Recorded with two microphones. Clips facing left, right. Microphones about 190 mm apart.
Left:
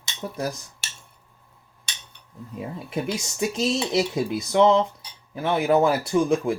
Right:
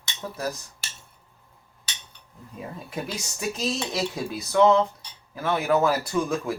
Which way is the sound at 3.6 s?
25° left (ahead or behind).